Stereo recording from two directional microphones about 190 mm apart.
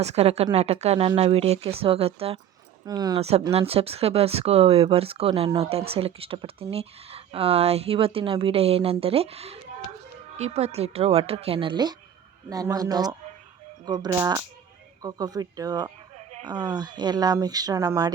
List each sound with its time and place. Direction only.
0.0 s speech: 35° right (ahead or behind)
2.8 s speech: 20° right (ahead or behind)
3.2 s speech: 35° right (ahead or behind)
16.1 s a sound: 35° right (ahead or behind)
16.5 s speech: 20° right (ahead or behind)